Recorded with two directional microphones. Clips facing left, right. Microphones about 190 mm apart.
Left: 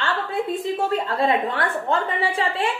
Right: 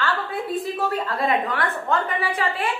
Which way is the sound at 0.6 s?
25° left (ahead or behind).